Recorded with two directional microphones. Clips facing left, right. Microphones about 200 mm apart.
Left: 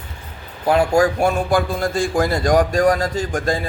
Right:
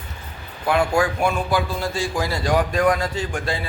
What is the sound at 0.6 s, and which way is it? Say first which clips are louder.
A man's voice: left 4 dB; 40° left (ahead or behind).